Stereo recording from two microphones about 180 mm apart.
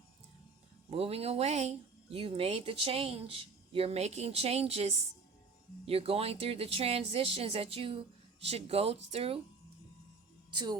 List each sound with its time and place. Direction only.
0.9 s speech: 35° right (ahead or behind)
10.5 s speech: 25° right (ahead or behind)